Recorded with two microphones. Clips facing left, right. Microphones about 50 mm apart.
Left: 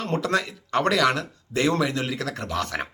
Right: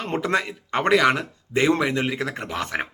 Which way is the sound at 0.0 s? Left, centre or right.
Right.